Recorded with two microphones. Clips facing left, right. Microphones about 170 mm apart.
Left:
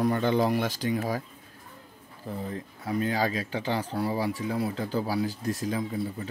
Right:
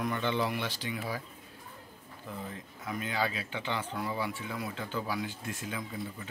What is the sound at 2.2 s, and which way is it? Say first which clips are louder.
Speech: left 7 dB; 35° left (ahead or behind).